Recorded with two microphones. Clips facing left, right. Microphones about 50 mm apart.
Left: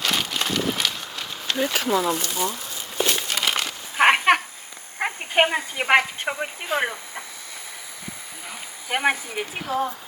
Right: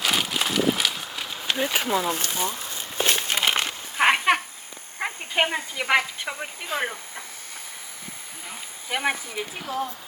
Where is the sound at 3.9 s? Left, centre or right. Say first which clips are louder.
Left 3 dB; left.